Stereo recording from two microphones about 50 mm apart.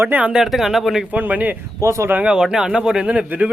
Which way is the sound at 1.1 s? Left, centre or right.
Right.